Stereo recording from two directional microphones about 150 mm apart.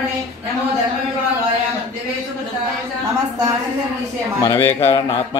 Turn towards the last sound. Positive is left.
turn(degrees=15)  # may be behind; listen again after turning